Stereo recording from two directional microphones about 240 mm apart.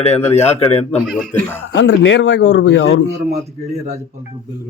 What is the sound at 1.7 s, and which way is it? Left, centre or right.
Speech, left.